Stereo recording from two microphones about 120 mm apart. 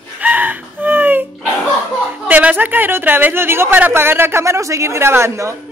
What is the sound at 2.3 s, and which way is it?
Speech, 15° right (ahead or behind).